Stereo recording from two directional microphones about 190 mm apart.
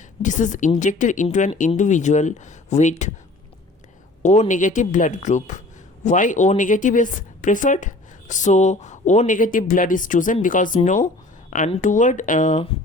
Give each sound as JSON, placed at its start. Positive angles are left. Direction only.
{"t": 0.2, "sound": "speech", "side_deg": 40}
{"t": 4.2, "sound": "speech", "side_deg": 40}